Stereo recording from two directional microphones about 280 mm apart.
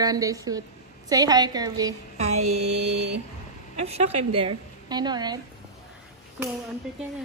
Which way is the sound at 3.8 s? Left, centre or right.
Centre.